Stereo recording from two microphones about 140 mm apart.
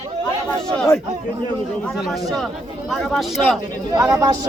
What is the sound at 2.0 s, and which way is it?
Speech, centre (ahead or behind).